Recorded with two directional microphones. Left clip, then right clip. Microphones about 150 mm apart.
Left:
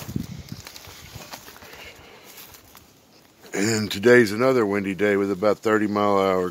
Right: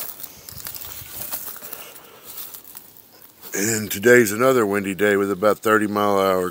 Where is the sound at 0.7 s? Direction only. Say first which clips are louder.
Right 6 dB; 90° right.